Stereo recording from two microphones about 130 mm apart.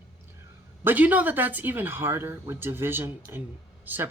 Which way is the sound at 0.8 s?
15° right (ahead or behind).